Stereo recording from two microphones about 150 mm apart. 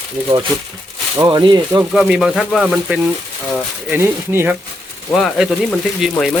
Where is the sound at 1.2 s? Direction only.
30° right (ahead or behind).